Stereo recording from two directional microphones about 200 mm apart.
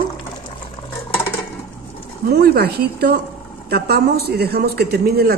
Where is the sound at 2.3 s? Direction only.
50° right (ahead or behind).